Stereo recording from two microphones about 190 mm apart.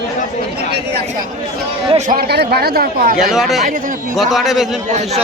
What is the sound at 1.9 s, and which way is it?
Speech, 35° right (ahead or behind).